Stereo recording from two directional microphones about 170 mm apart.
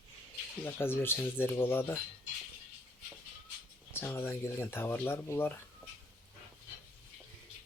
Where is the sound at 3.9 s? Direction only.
15° left (ahead or behind).